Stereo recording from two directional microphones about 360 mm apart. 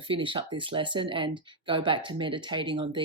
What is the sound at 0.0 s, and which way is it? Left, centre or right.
Speech, centre.